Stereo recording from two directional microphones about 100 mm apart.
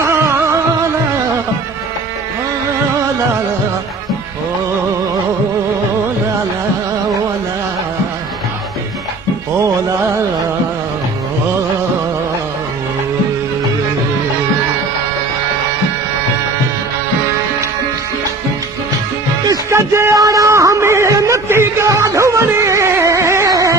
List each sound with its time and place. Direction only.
0.1 s music: 25° right (ahead or behind)
19.7 s music: 25° right (ahead or behind)